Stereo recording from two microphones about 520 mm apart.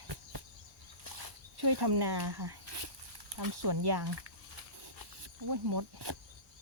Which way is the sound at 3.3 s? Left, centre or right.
Right.